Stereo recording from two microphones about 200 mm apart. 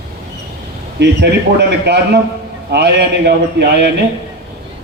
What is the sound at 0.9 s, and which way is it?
A man's voice, 60° right (ahead or behind).